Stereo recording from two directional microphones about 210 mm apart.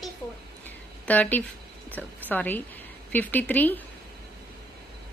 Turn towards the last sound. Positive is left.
turn(degrees=10)  # may be behind; listen again after turning